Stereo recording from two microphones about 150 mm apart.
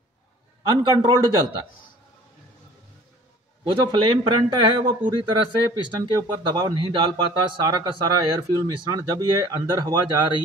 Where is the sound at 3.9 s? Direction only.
35° right (ahead or behind).